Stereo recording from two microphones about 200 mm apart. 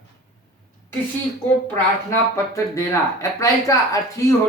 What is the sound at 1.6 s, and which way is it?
Speech, 15° left (ahead or behind).